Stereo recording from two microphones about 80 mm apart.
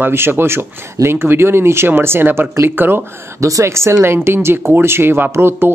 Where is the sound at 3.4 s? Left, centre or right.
Right.